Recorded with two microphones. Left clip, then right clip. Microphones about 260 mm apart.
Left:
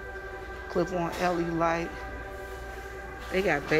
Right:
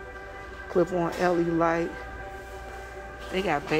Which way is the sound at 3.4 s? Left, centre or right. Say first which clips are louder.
Even; centre.